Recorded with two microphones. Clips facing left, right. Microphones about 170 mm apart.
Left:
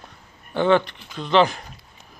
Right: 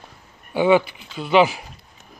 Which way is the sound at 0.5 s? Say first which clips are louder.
Right 2 dB; 10° right (ahead or behind).